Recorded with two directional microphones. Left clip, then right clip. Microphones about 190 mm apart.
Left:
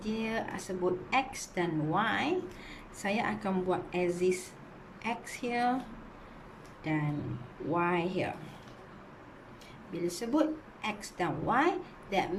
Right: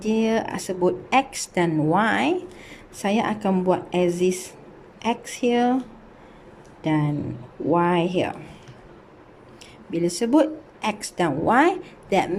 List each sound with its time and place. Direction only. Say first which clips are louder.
0.0 s a woman's voice: right 12 dB; 40° right (ahead or behind)
6.8 s a woman's voice: right 10 dB; 40° right (ahead or behind)
9.9 s a woman's voice: right 12 dB; 40° right (ahead or behind)